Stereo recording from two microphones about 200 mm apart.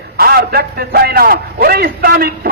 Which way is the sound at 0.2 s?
50° right (ahead or behind).